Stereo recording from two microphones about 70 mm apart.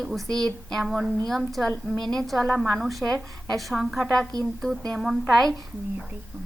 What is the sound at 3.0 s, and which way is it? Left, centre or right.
Speech, centre.